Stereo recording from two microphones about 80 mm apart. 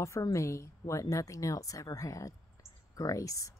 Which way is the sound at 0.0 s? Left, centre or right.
Left.